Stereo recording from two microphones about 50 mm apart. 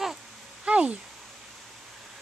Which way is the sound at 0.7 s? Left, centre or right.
Right.